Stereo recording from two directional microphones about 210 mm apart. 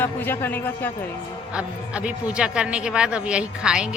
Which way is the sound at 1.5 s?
5° right (ahead or behind).